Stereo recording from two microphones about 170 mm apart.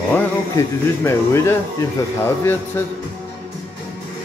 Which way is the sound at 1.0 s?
15° left (ahead or behind).